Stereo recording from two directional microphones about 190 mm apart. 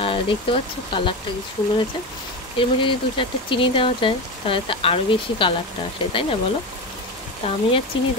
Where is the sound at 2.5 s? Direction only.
25° left (ahead or behind).